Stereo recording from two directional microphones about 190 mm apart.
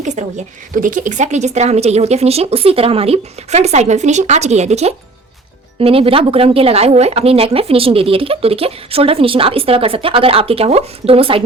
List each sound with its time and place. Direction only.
0.0 s a woman's voice: 40° right (ahead or behind)